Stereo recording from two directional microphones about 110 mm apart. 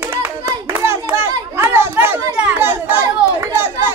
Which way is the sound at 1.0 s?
20° right (ahead or behind).